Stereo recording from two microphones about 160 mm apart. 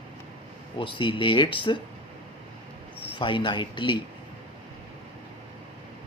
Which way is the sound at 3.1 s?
30° left (ahead or behind).